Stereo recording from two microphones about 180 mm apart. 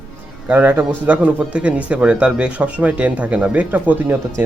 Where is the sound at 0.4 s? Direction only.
10° right (ahead or behind).